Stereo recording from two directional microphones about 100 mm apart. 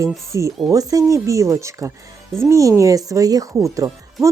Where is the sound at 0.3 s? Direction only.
30° right (ahead or behind).